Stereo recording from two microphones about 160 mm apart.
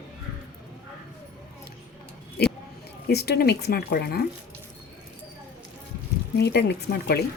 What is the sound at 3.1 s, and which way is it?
Speech, 85° left.